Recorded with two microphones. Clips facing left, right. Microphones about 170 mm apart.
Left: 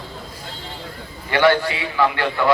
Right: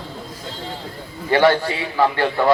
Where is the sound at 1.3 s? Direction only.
40° right (ahead or behind).